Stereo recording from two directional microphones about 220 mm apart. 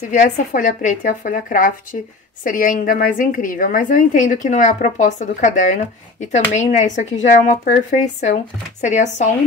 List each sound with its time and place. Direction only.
0.1 s a woman's voice: 35° left (ahead or behind)